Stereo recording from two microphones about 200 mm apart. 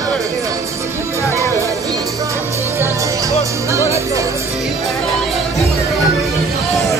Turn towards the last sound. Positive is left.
turn(degrees=0)  # may be behind; listen again after turning